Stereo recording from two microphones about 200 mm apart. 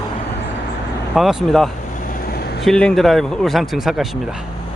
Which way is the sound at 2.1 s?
50° left (ahead or behind).